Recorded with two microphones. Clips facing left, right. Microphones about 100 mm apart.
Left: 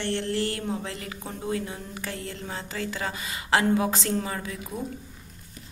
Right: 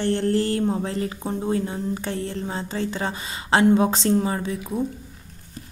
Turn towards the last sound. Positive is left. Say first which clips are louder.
# right 7 dB
turn(degrees=-30)  # may be behind; listen again after turning